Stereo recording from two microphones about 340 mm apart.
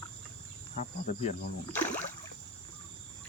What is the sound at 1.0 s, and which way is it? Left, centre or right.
Speech, left.